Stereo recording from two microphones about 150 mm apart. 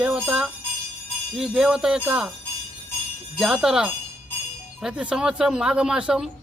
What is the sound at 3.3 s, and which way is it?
A man's voice, centre (ahead or behind).